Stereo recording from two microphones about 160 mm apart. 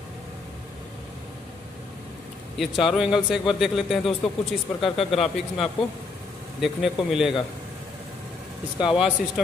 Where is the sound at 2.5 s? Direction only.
Centre (ahead or behind).